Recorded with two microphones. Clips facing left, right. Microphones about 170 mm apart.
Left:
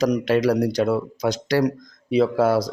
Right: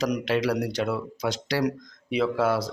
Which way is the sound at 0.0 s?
40° left (ahead or behind).